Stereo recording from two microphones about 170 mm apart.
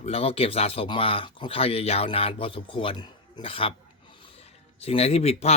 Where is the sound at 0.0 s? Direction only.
35° left (ahead or behind).